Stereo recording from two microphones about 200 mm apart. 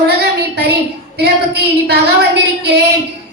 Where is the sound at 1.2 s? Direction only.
55° right (ahead or behind).